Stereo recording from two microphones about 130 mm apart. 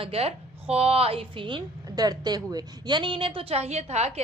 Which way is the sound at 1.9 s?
30° right (ahead or behind).